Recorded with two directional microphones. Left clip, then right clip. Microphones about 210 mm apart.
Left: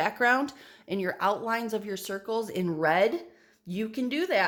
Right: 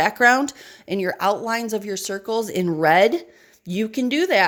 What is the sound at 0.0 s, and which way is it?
Speech, 35° right (ahead or behind).